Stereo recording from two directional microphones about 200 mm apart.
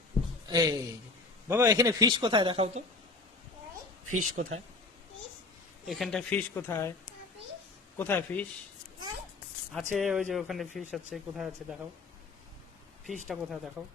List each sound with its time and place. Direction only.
0.4 s speech: 20° right (ahead or behind)
4.2 s speech: 40° right (ahead or behind)
5.9 s speech: centre (ahead or behind)
7.9 s speech: 10° left (ahead or behind)
9.7 s speech: centre (ahead or behind)
13.2 s speech: centre (ahead or behind)